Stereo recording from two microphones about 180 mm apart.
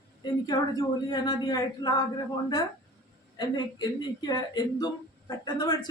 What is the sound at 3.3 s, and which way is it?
Speech, 20° left (ahead or behind).